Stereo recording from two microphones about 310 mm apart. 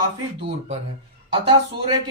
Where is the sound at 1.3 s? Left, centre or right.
Centre.